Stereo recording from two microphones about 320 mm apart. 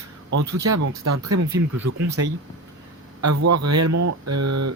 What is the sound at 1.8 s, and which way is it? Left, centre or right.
Speech, right.